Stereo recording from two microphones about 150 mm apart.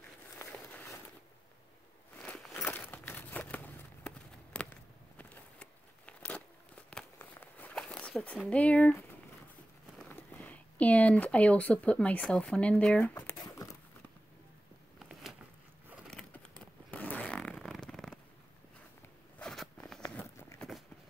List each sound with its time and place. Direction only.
0.4 s walk: 10° left (ahead or behind)
2.1 s crumpling: 5° left (ahead or behind)
8.5 s speech: 10° left (ahead or behind)
13.1 s crumpling: 20° left (ahead or behind)
16.1 s fart: 5° left (ahead or behind)
19.4 s zipper: 5° left (ahead or behind)
20.1 s a sound: 10° left (ahead or behind)